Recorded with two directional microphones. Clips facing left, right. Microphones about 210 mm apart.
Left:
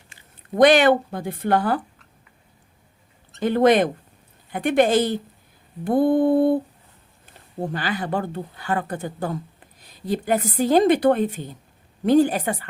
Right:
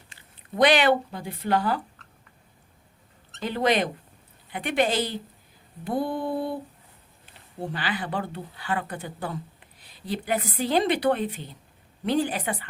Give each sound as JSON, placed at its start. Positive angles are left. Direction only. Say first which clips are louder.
{"t": 0.5, "sound": "speech", "louder": "left 5 dB", "side_deg": 45}
{"t": 3.4, "sound": "speech", "louder": "left 7 dB", "side_deg": 50}